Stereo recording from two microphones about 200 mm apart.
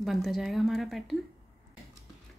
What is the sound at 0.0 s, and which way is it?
Speech, centre (ahead or behind).